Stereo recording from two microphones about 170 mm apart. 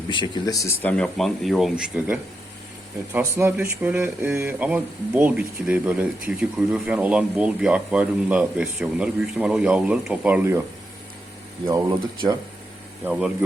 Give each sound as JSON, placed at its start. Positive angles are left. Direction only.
{"t": 0.1, "sound": "speech", "side_deg": 25}
{"t": 11.7, "sound": "speech", "side_deg": -20}
{"t": 13.1, "sound": "speech", "side_deg": -10}